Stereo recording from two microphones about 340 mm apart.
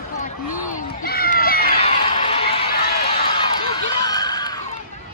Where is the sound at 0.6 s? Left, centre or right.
Left.